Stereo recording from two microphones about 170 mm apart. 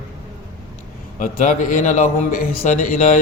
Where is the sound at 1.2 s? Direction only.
50° left (ahead or behind).